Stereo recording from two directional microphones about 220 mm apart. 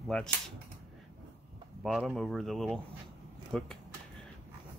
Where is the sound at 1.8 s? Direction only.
Centre (ahead or behind).